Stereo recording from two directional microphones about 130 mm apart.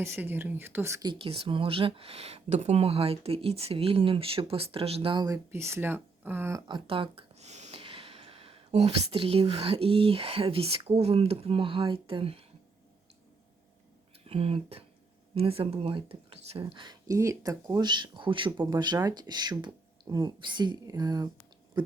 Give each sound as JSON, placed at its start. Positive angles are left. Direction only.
{"t": 0.0, "sound": "speech", "side_deg": -15}
{"t": 1.0, "sound": "speech", "side_deg": -40}
{"t": 5.1, "sound": "speech", "side_deg": -30}
{"t": 6.7, "sound": "speech", "side_deg": -40}
{"t": 7.3, "sound": "speech", "side_deg": -60}
{"t": 14.3, "sound": "speech", "side_deg": -50}